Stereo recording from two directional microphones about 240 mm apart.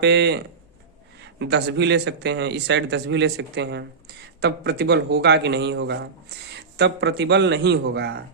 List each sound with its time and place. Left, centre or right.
0.0 s a man's voice: right